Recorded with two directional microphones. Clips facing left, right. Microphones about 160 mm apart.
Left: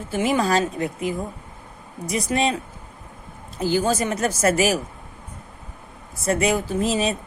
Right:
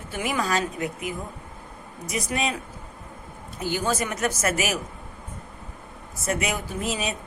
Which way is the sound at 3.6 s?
35° left (ahead or behind).